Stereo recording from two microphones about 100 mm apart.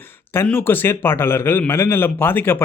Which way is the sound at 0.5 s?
20° left (ahead or behind).